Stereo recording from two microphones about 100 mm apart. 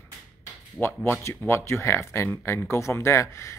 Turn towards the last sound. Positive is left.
turn(degrees=30)  # may be behind; listen again after turning